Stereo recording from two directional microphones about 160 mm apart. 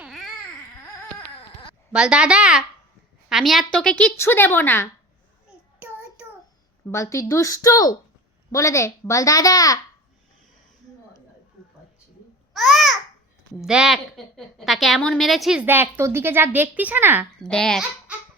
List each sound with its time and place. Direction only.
0.0 s babbling: centre (ahead or behind)
1.9 s a woman's voice: 5° right (ahead or behind); by 4.9 s 15° left (ahead or behind)
6.8 s a woman's voice: 20° left (ahead or behind)
12.5 s babbling: centre (ahead or behind)
13.6 s a woman's voice: 5° right (ahead or behind)
17.4 s a woman's voice: 5° left (ahead or behind)